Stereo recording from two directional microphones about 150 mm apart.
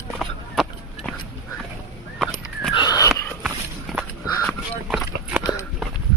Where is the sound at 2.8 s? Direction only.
25° left (ahead or behind).